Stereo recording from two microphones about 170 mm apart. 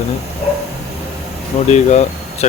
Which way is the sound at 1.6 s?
40° left (ahead or behind).